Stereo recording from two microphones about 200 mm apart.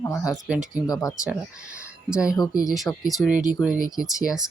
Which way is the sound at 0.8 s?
15° left (ahead or behind).